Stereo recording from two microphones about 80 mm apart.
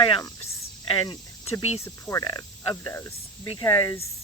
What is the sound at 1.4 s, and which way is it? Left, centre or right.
Cricket, left.